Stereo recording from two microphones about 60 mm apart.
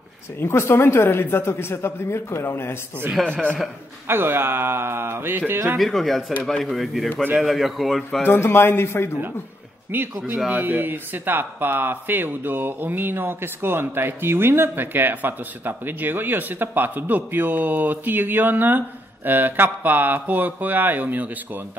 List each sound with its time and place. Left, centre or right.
0.4 s speech: left
3.2 s a man's voice: centre
4.1 s speech: right
5.8 s a man's voice: centre
8.3 s a man's voice: left
9.9 s speech: right